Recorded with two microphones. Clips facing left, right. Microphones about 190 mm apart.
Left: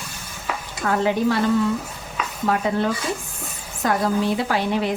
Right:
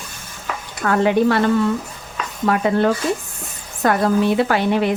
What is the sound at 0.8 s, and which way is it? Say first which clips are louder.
Speech: right 4 dB; 65° right (ahead or behind).